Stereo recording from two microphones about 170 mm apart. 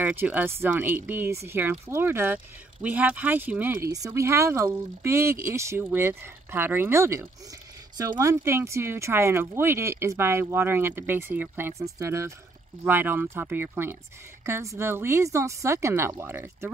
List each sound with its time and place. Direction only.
0.0 s speech: 10° right (ahead or behind)